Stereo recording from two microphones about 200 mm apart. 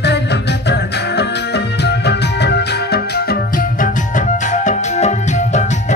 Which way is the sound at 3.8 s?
40° left (ahead or behind).